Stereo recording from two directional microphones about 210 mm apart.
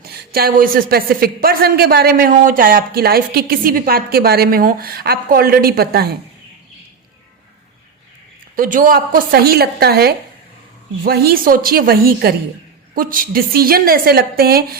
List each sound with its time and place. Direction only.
0.0 s a woman's voice: 45° right (ahead or behind)
8.5 s a woman's voice: 40° right (ahead or behind)